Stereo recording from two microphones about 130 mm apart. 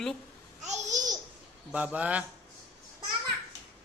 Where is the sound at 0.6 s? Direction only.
65° right (ahead or behind).